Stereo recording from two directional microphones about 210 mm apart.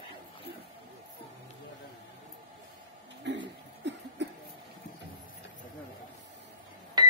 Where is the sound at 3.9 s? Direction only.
55° right (ahead or behind).